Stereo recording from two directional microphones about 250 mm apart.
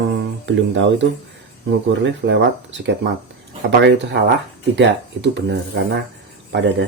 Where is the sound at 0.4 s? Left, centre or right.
Right.